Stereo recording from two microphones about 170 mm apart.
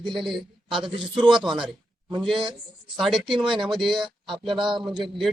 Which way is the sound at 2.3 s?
30° right (ahead or behind).